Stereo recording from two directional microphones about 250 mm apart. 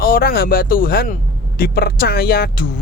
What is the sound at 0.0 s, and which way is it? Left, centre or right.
Speech, left.